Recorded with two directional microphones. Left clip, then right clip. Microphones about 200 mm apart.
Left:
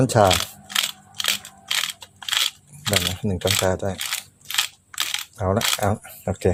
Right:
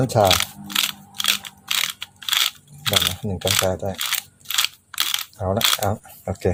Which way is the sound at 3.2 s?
25° left (ahead or behind).